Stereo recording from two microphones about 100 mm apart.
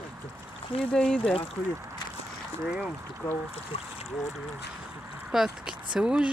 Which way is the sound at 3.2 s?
15° left (ahead or behind).